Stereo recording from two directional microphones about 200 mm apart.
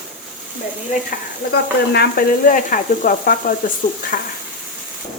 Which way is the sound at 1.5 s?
55° left (ahead or behind).